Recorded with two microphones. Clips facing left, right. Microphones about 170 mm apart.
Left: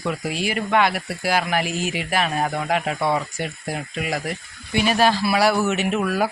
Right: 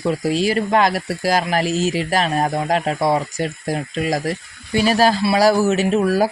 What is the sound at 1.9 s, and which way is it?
Speech, 35° right (ahead or behind).